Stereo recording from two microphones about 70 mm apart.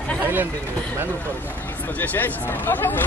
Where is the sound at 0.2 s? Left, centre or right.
Right.